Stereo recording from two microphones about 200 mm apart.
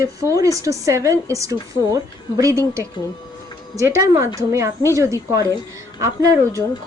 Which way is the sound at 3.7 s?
15° right (ahead or behind).